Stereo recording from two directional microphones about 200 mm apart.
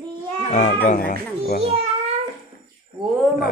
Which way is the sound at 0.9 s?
40° left (ahead or behind).